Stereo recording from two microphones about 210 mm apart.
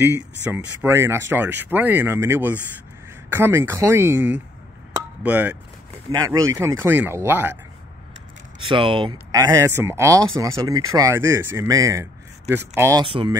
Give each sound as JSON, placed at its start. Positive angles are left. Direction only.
{"t": 0.5, "sound": "speech", "side_deg": -10}
{"t": 8.5, "sound": "speech", "side_deg": -25}
{"t": 13.0, "sound": "speech", "side_deg": -25}